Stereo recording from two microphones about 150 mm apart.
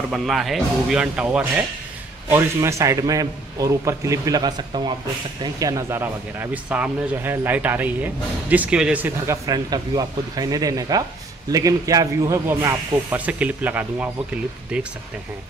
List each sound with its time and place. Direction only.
0.1 s speech: centre (ahead or behind)
2.2 s a man's voice: 20° right (ahead or behind)